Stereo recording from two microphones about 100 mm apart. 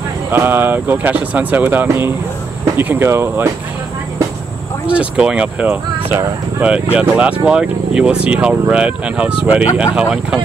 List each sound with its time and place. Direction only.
0.3 s speech: 20° right (ahead or behind)
4.8 s speech: 10° right (ahead or behind)